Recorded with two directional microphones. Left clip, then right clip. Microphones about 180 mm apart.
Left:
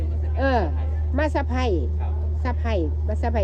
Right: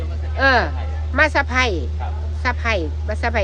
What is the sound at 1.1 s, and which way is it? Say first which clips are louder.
Speech: right 9 dB; centre (ahead or behind).